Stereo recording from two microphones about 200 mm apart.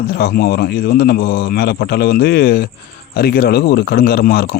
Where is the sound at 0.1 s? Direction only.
50° left (ahead or behind).